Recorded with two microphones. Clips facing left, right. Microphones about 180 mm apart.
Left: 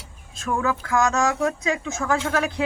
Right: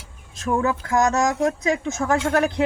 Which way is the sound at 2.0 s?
20° right (ahead or behind).